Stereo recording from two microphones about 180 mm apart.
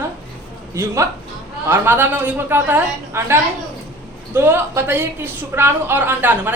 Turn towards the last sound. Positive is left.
turn(degrees=-10)  # may be behind; listen again after turning